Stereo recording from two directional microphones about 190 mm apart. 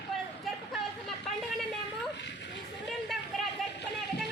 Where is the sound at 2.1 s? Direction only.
70° left (ahead or behind).